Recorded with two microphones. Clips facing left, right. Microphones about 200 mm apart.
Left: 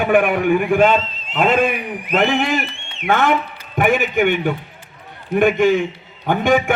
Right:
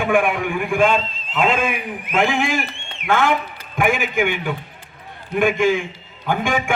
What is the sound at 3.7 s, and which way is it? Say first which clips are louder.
Speech: left 3 dB; 40° left (ahead or behind).